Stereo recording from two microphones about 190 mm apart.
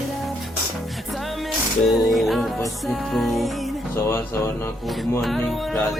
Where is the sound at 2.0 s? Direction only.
Centre (ahead or behind).